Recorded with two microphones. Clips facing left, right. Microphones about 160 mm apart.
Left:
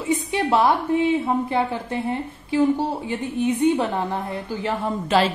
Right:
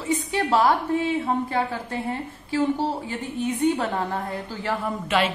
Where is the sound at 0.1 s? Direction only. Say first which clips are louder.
Left 2 dB; 20° left (ahead or behind).